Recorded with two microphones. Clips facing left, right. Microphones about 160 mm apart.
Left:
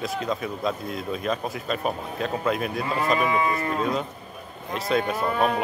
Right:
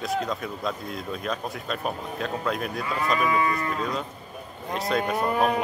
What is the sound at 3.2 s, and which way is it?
Speech, 25° left (ahead or behind).